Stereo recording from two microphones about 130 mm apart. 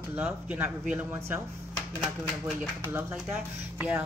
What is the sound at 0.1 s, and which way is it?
A woman's voice, 15° right (ahead or behind).